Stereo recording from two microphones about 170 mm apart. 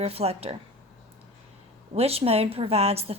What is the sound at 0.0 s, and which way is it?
Speech, 35° right (ahead or behind).